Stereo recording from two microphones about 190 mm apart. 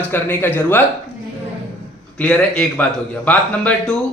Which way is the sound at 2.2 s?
5° left (ahead or behind).